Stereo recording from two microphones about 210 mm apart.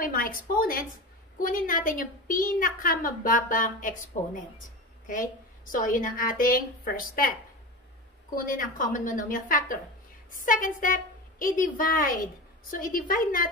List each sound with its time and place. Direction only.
0.0 s a woman's voice: 40° left (ahead or behind)
8.4 s a woman's voice: 40° left (ahead or behind)